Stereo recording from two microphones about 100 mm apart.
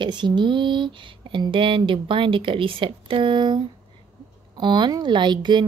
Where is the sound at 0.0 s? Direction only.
50° right (ahead or behind).